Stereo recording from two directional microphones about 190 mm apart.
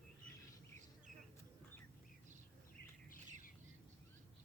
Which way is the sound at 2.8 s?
55° left (ahead or behind).